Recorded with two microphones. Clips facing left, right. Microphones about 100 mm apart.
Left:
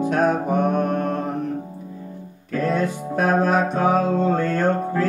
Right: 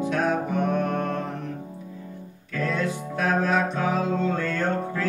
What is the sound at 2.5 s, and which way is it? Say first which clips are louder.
Music: left 5 dB; 45° left (ahead or behind).